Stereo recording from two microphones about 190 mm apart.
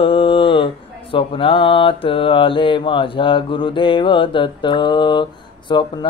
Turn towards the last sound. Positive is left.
turn(degrees=25)  # may be behind; listen again after turning